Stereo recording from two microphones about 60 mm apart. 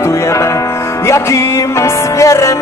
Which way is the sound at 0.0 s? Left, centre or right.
Left.